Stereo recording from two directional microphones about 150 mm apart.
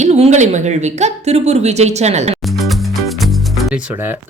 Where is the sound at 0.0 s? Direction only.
50° right (ahead or behind).